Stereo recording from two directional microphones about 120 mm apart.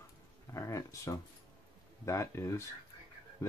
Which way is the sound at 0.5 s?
25° left (ahead or behind).